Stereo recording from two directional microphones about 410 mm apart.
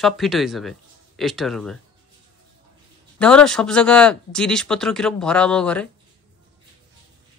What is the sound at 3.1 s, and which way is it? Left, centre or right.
Speech, centre.